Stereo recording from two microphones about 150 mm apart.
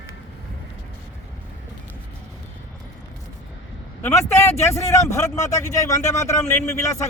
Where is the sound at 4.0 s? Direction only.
20° left (ahead or behind).